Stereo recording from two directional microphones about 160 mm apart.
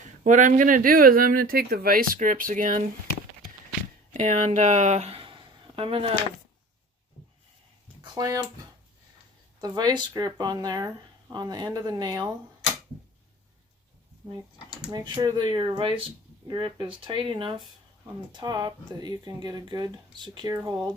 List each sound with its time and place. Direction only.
0.3 s speech: 50° right (ahead or behind)
4.1 s speech: 50° right (ahead or behind); by 6.1 s 35° right (ahead or behind)
8.0 s speech: 25° right (ahead or behind)
9.6 s speech: 25° right (ahead or behind)
14.8 s speech: 30° right (ahead or behind)